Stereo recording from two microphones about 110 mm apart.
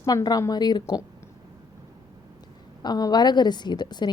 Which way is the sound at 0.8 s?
25° left (ahead or behind).